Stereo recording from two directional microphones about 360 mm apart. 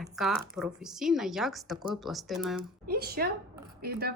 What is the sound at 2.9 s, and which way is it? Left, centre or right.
Speech, right.